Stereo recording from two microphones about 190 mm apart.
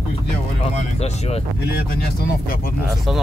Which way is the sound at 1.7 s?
55° left (ahead or behind).